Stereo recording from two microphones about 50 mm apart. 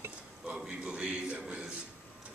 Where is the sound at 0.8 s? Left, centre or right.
Right.